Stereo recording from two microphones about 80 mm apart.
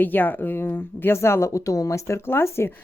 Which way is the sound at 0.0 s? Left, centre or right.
Left.